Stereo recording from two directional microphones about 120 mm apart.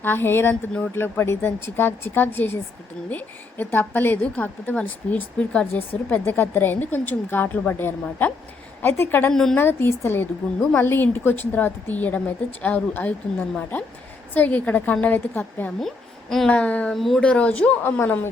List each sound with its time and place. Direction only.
0.0 s a woman's voice: 15° left (ahead or behind)
9.3 s a woman's voice: 5° left (ahead or behind)
9.6 s a woman's voice: 15° left (ahead or behind)